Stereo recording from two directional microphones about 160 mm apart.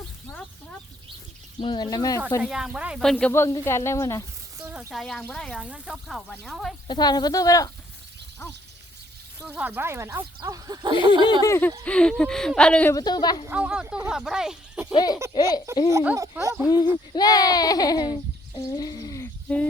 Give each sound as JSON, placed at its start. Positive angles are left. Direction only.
{"t": 1.5, "sound": "speech", "side_deg": 30}
{"t": 2.4, "sound": "speech", "side_deg": -5}
{"t": 4.5, "sound": "a sound", "side_deg": -15}
{"t": 4.9, "sound": "speech", "side_deg": 0}
{"t": 6.8, "sound": "speech", "side_deg": 25}
{"t": 9.5, "sound": "speech", "side_deg": -10}
{"t": 11.4, "sound": "speech", "side_deg": 15}
{"t": 11.9, "sound": "speech", "side_deg": 5}
{"t": 12.9, "sound": "speech", "side_deg": 25}
{"t": 13.5, "sound": "speech", "side_deg": -5}
{"t": 14.9, "sound": "speech", "side_deg": 25}
{"t": 15.9, "sound": "speech", "side_deg": -20}
{"t": 16.6, "sound": "speech", "side_deg": 25}
{"t": 19.5, "sound": "speech", "side_deg": 5}